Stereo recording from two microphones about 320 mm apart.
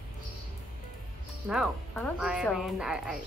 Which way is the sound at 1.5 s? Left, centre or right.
Centre.